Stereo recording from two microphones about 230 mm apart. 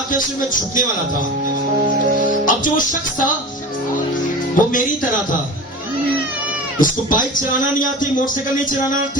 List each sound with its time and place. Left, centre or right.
0.1 s music: left
2.4 s music: left
4.6 s music: left
6.7 s music: left